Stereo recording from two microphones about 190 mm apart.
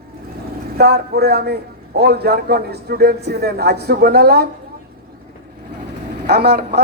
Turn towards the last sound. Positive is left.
turn(degrees=-60)  # may be behind; listen again after turning